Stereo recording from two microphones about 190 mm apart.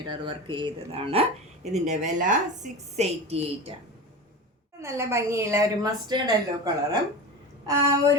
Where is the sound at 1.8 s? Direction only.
40° right (ahead or behind).